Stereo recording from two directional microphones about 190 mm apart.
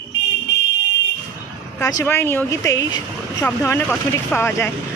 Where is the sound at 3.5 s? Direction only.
10° left (ahead or behind).